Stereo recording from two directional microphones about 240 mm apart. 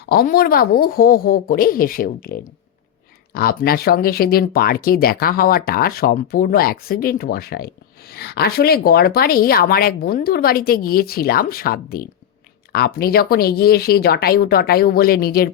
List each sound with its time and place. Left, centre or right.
0.0 s speech: left